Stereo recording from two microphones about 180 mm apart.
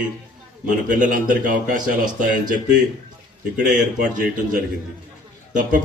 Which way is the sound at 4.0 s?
50° right (ahead or behind).